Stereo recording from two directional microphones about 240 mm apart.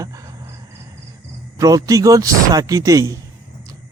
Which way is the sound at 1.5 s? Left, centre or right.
Centre.